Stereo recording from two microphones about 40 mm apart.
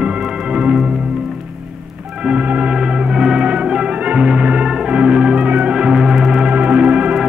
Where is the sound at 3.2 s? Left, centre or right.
Centre.